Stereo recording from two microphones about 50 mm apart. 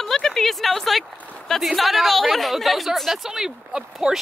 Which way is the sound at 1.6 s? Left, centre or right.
Centre.